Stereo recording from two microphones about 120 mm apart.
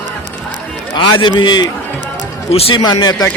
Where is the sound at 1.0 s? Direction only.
40° left (ahead or behind).